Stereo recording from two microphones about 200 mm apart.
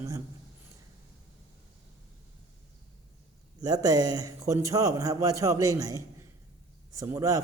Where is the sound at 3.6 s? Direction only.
20° right (ahead or behind).